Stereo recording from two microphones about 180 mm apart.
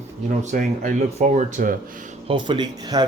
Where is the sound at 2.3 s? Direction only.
25° right (ahead or behind).